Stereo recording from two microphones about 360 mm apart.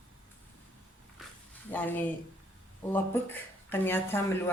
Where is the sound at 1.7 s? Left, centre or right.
Centre.